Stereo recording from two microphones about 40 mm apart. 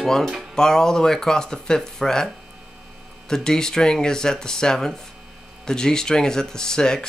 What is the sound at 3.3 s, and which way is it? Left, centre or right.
Speech, centre.